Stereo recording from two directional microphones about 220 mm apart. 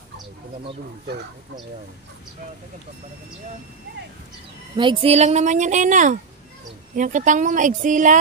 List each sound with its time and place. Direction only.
1.0 s speech: 45° right (ahead or behind)
4.7 s speech: 25° right (ahead or behind)